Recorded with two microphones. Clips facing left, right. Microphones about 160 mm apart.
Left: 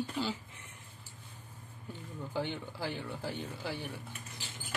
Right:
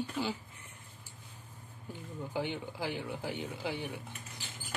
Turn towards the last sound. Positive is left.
turn(degrees=-15)  # may be behind; listen again after turning